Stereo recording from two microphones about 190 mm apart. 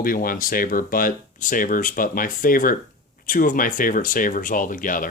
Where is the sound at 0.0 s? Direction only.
50° left (ahead or behind).